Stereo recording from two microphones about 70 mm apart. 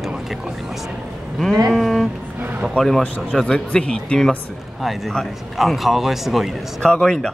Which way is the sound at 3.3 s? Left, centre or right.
Centre.